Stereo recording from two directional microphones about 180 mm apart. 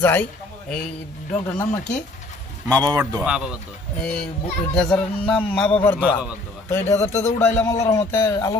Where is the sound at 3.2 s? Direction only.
5° right (ahead or behind).